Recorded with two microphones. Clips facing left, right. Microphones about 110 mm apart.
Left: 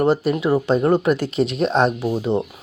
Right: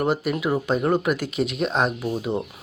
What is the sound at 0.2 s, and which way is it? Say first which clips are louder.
Speech: left 5 dB; 30° left (ahead or behind).